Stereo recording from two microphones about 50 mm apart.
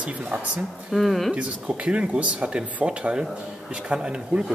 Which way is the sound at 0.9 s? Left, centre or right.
Centre.